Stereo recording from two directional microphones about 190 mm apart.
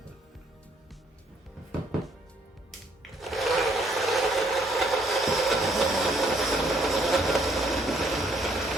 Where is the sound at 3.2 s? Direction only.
Centre (ahead or behind).